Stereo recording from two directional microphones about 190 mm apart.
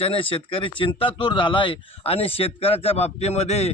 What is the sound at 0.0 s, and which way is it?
A man's voice, 30° left (ahead or behind).